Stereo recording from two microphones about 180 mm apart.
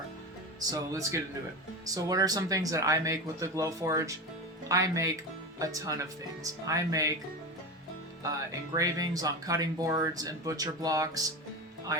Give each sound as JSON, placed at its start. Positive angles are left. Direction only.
{"t": 0.7, "sound": "speech", "side_deg": -20}
{"t": 8.7, "sound": "speech", "side_deg": -20}